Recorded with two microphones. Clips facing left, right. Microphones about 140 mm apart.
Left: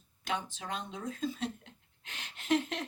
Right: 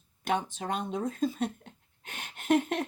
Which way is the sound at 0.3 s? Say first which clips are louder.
Right 6 dB; 50° right (ahead or behind).